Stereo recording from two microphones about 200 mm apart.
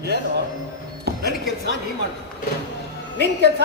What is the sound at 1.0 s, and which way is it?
Music, 55° right (ahead or behind).